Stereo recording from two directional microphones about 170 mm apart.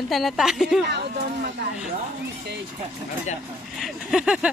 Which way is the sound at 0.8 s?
75° right (ahead or behind).